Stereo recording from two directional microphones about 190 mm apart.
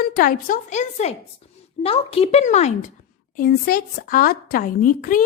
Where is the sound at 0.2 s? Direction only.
45° left (ahead or behind).